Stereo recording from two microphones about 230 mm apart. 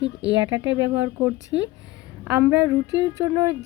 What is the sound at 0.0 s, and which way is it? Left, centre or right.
Speech, right.